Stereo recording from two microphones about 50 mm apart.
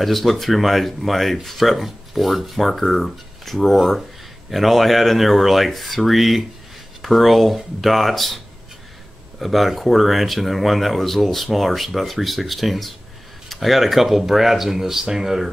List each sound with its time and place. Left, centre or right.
0.0 s speech: centre
9.4 s speech: centre